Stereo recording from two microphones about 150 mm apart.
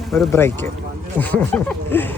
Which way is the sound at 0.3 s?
15° left (ahead or behind).